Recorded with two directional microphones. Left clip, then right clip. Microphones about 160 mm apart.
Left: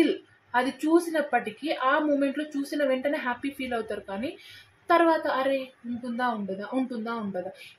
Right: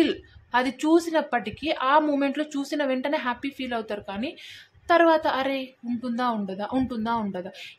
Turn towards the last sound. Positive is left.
turn(degrees=-30)  # may be behind; listen again after turning